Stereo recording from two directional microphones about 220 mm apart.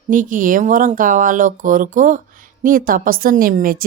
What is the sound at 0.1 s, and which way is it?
A woman's voice, 35° right (ahead or behind).